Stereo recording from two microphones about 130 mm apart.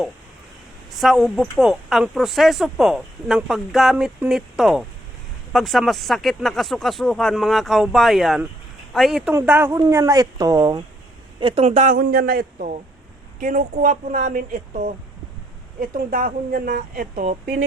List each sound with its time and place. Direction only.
0.9 s speech: centre (ahead or behind)
9.3 s speech: 15° right (ahead or behind); by 10.8 s 30° right (ahead or behind)
11.3 s speech: 45° right (ahead or behind); by 12.7 s 90° right
13.4 s speech: 70° right (ahead or behind)
15.8 s speech: 90° right
17.2 s speech: 70° right (ahead or behind)